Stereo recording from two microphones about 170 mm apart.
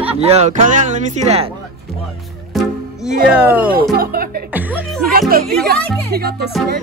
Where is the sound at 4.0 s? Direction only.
60° right (ahead or behind).